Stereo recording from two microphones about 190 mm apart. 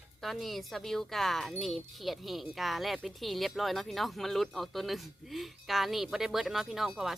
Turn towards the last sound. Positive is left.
turn(degrees=0)  # may be behind; listen again after turning